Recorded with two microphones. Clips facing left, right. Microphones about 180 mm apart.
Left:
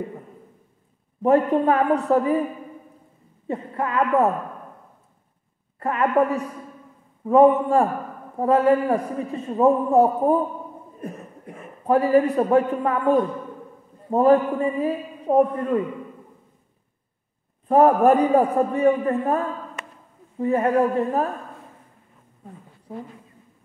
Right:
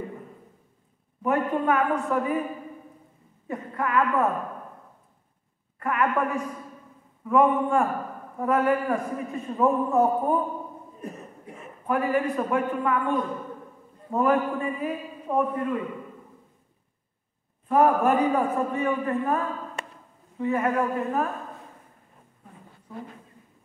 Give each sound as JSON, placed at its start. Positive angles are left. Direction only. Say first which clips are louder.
{"t": 1.2, "sound": "a man's voice", "louder": "left 6 dB", "side_deg": 35}
{"t": 3.4, "sound": "speech", "louder": "left 3 dB", "side_deg": 30}
{"t": 5.8, "sound": "a man's voice", "louder": "left 5 dB", "side_deg": 30}
{"t": 11.8, "sound": "a man's voice", "louder": "left 7 dB", "side_deg": 35}
{"t": 17.6, "sound": "a man's voice", "louder": "left 5 dB", "side_deg": 35}
{"t": 19.8, "sound": "a sound", "louder": "right 1 dB", "side_deg": -30}
{"t": 20.3, "sound": "a man's voice", "louder": "left 5 dB", "side_deg": 35}